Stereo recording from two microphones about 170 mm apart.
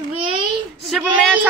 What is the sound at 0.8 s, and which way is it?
Speech, centre (ahead or behind).